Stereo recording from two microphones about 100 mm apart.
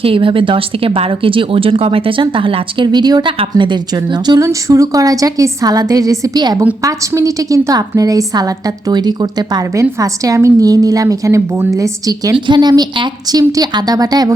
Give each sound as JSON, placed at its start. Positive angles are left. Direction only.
{"t": 0.0, "sound": "a woman's voice", "side_deg": -60}
{"t": 3.9, "sound": "a woman's voice", "side_deg": -40}
{"t": 12.5, "sound": "a woman's voice", "side_deg": -45}